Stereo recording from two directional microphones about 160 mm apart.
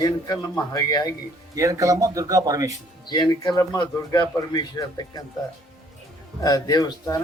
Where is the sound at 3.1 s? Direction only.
25° left (ahead or behind).